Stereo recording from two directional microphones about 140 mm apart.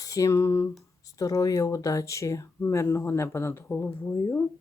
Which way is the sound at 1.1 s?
25° left (ahead or behind).